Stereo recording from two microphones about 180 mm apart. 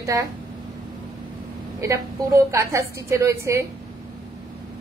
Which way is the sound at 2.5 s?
15° right (ahead or behind).